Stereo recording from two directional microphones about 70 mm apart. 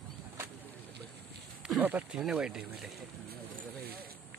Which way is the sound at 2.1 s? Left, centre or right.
Centre.